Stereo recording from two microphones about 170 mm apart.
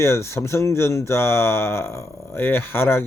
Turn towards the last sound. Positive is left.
turn(degrees=15)  # may be behind; listen again after turning